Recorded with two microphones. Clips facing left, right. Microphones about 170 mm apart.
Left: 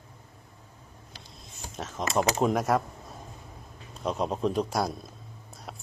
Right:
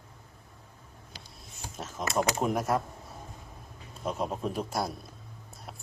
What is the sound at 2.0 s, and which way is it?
Speech, 25° left (ahead or behind).